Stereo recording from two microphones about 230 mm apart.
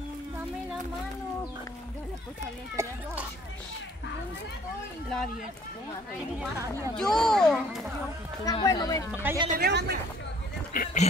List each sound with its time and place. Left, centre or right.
2.7 s a child's voice: centre
7.0 s a child's voice: centre
8.5 s speech: centre
9.1 s a child's voice: centre
9.5 s a woman's voice: right
10.7 s a sound: left